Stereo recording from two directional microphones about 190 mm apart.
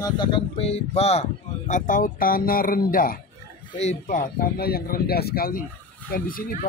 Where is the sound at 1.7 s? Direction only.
45° left (ahead or behind).